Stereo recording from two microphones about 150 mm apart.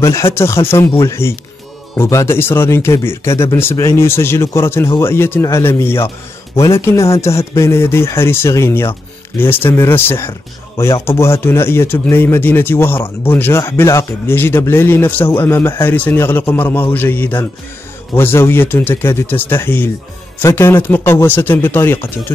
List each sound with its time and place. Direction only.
0.0 s speech: 20° left (ahead or behind)